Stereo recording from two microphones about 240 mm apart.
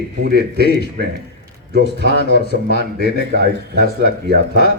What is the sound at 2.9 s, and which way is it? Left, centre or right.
Speech, right.